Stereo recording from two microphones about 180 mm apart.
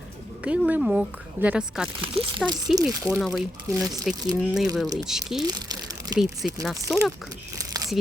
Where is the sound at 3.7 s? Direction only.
20° right (ahead or behind).